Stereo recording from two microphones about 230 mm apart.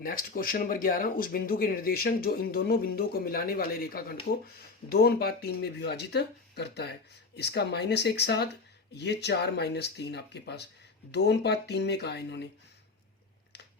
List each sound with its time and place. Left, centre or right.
0.0 s speech: left